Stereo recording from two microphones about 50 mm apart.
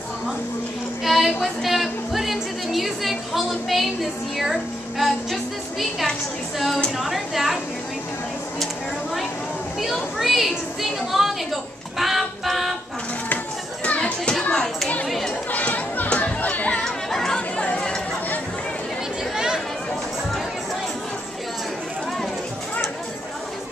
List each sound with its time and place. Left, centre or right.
1.0 s a woman's voice: centre
10.1 s a woman's voice: centre
13.8 s children playing: left
15.0 s chatter: centre
15.5 s chatter: left
16.3 s music: left
16.7 s music: centre
17.6 s chatter: left
19.3 s chatter: centre